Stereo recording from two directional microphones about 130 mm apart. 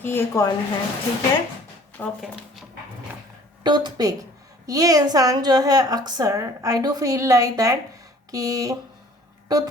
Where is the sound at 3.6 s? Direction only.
35° right (ahead or behind).